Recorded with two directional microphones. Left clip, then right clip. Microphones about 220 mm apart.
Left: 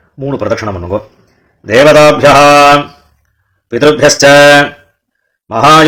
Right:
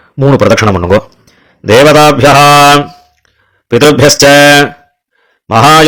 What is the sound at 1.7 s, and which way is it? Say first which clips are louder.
Mantra: right 1 dB; 40° right (ahead or behind).